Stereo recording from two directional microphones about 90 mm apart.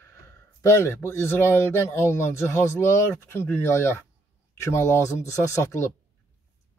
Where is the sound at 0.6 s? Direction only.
30° left (ahead or behind).